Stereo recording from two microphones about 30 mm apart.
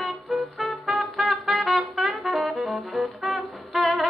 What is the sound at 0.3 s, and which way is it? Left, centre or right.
Music, centre.